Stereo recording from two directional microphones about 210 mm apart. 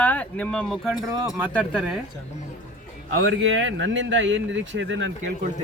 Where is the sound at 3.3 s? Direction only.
65° right (ahead or behind).